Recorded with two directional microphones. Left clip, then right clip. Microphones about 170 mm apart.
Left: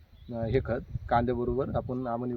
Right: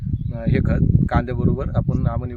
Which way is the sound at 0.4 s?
5° right (ahead or behind).